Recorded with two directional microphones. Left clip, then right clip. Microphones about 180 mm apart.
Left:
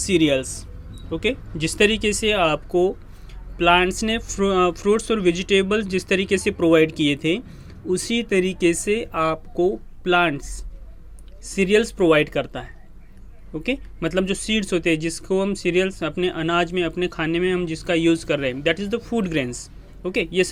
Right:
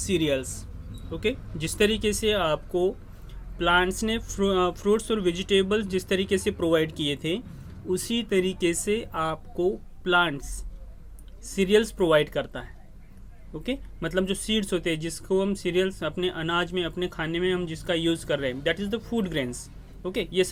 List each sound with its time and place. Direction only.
0.0 s speech: 25° left (ahead or behind)